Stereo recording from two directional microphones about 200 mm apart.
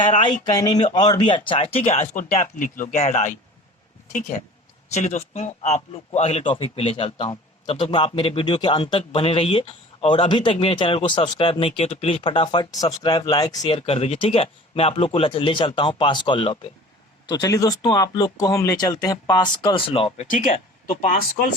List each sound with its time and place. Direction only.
0.5 s a man's voice: 20° left (ahead or behind)
20.3 s speech: 35° left (ahead or behind)